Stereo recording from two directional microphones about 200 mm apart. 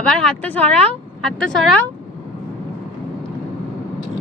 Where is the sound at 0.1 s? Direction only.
5° left (ahead or behind).